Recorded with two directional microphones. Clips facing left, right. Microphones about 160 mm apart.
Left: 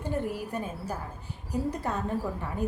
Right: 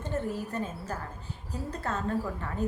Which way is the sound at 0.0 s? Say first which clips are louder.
Left 1 dB; 10° left (ahead or behind).